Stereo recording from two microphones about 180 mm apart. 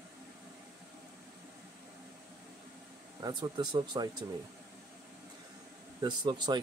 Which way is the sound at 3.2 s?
25° right (ahead or behind).